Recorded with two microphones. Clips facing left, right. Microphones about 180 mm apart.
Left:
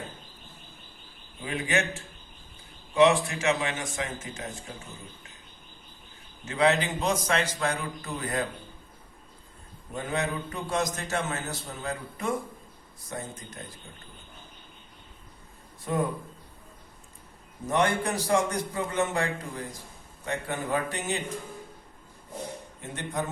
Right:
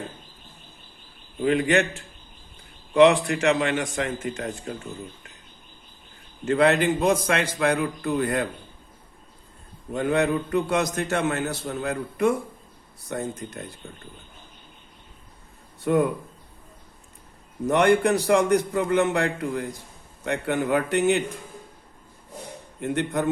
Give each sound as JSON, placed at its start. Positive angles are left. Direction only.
{"t": 1.4, "sound": "a man's voice", "side_deg": -60}
{"t": 6.4, "sound": "a man's voice", "side_deg": -60}
{"t": 9.9, "sound": "a man's voice", "side_deg": -65}
{"t": 17.7, "sound": "a man's voice", "side_deg": -65}
{"t": 22.8, "sound": "a man's voice", "side_deg": -60}